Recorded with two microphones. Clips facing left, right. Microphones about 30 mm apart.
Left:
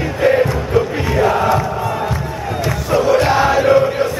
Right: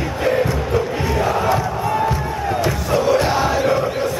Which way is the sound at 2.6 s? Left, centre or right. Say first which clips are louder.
Left 4 dB; centre.